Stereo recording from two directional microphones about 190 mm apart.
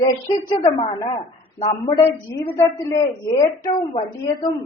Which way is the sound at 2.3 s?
10° left (ahead or behind).